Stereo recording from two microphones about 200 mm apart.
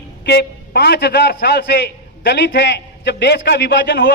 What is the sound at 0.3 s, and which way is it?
A man's voice, 55° left (ahead or behind).